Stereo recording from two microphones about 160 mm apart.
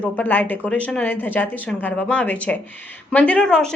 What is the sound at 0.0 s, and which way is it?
A woman's voice, 10° left (ahead or behind).